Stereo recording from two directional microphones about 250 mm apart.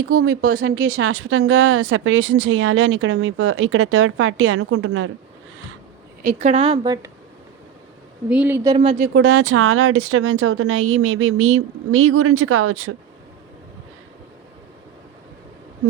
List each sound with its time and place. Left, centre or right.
0.1 s a woman's voice: right
6.2 s a woman's voice: right
8.3 s speech: centre; by 9.0 s right
9.1 s speech: right